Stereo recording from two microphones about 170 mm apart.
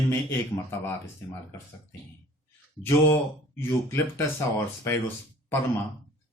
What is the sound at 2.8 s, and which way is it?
Speech, 15° left (ahead or behind).